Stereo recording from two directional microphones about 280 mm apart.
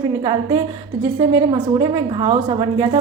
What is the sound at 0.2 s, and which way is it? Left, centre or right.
A woman's voice, centre.